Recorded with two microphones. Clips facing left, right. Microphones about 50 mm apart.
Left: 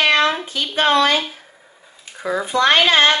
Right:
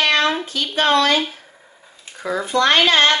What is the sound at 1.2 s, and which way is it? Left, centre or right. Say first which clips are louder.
Speech: right 2 dB; centre.